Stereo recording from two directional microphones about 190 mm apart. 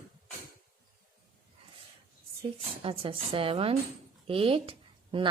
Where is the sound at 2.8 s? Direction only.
30° right (ahead or behind).